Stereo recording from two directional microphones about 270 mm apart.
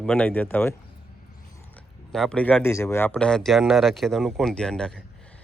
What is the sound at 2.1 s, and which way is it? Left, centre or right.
Speech, centre.